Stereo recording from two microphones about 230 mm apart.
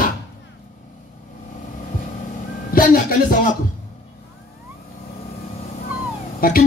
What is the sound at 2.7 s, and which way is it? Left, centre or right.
Speech, left.